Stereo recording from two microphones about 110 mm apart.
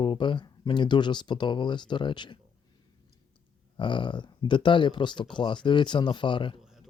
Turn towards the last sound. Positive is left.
turn(degrees=-5)  # may be behind; listen again after turning